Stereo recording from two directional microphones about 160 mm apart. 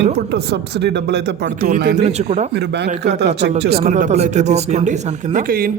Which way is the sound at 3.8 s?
45° right (ahead or behind).